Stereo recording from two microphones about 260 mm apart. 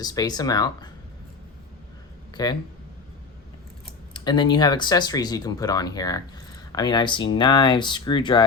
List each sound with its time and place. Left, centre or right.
0.0 s speech: centre
2.3 s speech: centre
4.1 s speech: centre